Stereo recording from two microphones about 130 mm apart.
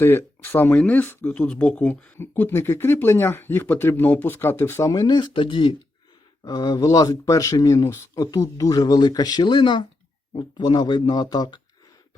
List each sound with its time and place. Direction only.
0.0 s speech: 15° left (ahead or behind); by 11.6 s 35° left (ahead or behind)